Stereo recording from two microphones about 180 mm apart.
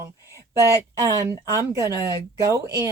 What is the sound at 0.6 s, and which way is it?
Speech, 15° right (ahead or behind).